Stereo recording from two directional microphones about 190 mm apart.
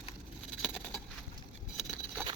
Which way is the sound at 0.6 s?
Centre (ahead or behind).